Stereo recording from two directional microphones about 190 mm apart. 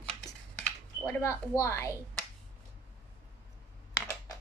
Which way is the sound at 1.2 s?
15° left (ahead or behind).